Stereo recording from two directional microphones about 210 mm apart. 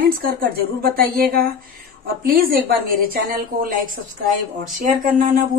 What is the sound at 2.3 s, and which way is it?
Speech, 50° right (ahead or behind).